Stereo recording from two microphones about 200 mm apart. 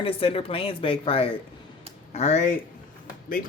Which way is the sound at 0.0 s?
30° left (ahead or behind).